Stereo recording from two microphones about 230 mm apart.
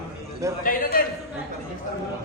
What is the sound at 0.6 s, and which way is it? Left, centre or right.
Speech, left.